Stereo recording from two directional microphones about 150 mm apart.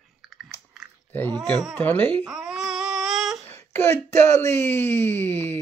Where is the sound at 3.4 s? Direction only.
15° left (ahead or behind).